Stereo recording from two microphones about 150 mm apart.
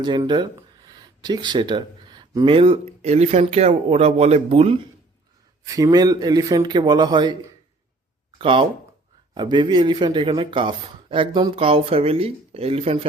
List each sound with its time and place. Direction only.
0.2 s speech: 30° right (ahead or behind)
5.6 s a man's voice: 25° right (ahead or behind)
8.4 s speech: 35° right (ahead or behind)